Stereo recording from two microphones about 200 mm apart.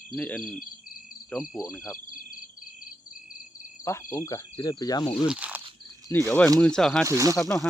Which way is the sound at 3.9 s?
15° left (ahead or behind).